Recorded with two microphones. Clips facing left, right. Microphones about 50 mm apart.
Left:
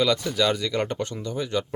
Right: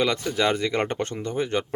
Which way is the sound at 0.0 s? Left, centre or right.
Right.